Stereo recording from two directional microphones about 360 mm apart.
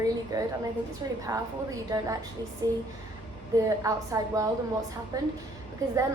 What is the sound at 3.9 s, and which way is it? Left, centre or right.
Speech, centre.